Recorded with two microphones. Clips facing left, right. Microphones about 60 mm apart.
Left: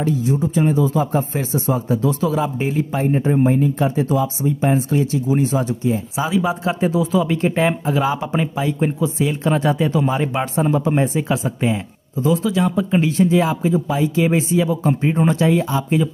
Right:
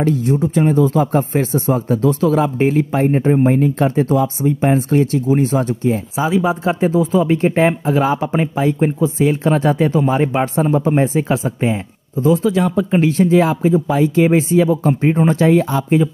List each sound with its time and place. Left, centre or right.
0.0 s speech: right
12.3 s speech: right